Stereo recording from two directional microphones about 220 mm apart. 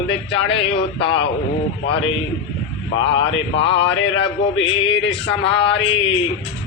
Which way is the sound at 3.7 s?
25° left (ahead or behind).